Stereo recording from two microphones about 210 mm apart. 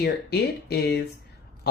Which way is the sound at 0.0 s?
50° left (ahead or behind).